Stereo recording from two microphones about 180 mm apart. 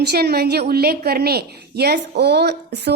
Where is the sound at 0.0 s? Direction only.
65° right (ahead or behind).